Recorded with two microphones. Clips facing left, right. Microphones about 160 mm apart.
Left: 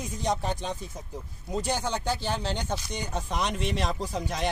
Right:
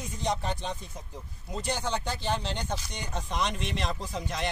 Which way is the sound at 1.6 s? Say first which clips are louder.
Left 2 dB; 5° left (ahead or behind).